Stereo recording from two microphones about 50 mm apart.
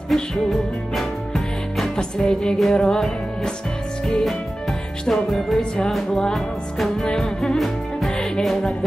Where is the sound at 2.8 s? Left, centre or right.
Centre.